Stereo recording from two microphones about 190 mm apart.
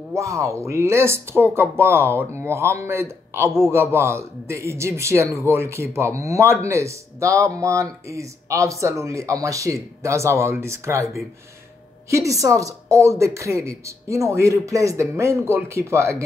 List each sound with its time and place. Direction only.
0.1 s speech: 15° right (ahead or behind)
12.1 s speech: 15° right (ahead or behind)